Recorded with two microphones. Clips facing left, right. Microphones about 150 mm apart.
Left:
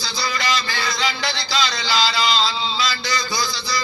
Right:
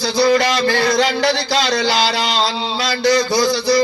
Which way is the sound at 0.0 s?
65° right (ahead or behind).